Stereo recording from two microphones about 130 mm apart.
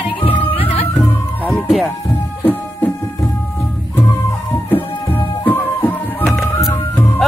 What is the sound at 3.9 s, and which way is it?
Music, 15° left (ahead or behind).